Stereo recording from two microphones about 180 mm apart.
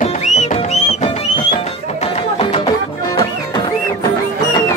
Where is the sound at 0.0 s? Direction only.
40° left (ahead or behind).